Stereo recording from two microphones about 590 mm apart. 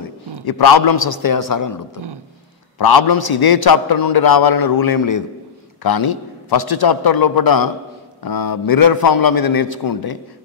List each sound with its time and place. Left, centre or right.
0.5 s a man's voice: left
2.8 s a man's voice: left